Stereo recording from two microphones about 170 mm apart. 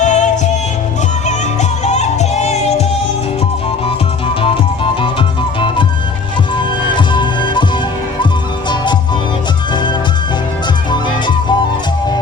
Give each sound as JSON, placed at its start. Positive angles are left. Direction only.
{"t": 0.0, "sound": "music", "side_deg": 45}
{"t": 1.8, "sound": "music", "side_deg": 40}
{"t": 4.4, "sound": "music", "side_deg": 30}
{"t": 8.7, "sound": "music", "side_deg": 25}